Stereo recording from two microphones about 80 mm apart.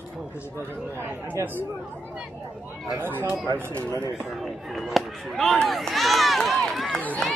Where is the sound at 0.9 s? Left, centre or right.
Right.